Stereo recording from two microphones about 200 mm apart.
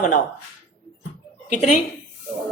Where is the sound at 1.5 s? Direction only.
40° left (ahead or behind).